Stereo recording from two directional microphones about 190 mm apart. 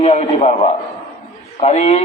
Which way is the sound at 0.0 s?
35° left (ahead or behind).